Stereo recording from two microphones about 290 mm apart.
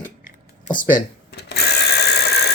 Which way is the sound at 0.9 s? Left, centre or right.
Left.